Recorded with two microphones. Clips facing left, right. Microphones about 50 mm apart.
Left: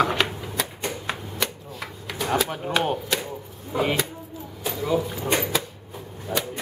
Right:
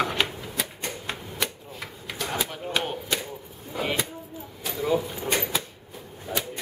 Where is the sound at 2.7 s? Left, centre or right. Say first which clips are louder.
Left 5 dB; centre.